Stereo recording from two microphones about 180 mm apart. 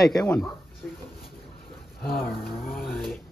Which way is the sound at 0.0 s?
5° left (ahead or behind).